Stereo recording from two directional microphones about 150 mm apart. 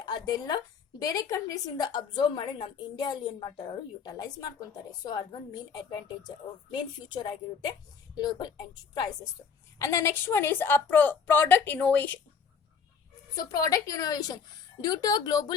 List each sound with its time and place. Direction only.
0.0 s a woman's voice: 25° left (ahead or behind); by 12.1 s 10° left (ahead or behind)
13.3 s a woman's voice: 20° left (ahead or behind)